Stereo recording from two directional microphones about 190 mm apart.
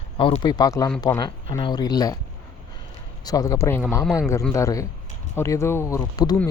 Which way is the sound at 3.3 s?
20° left (ahead or behind).